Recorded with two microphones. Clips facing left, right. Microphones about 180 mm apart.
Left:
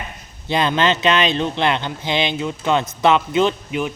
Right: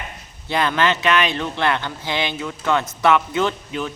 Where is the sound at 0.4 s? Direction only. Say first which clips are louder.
Left 2 dB; 20° left (ahead or behind).